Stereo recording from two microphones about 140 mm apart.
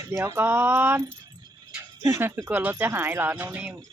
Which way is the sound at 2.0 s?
15° right (ahead or behind).